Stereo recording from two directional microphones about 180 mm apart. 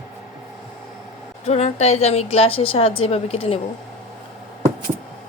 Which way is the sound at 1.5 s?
35° left (ahead or behind).